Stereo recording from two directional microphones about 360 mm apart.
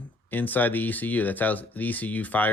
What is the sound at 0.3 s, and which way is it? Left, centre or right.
Speech, centre.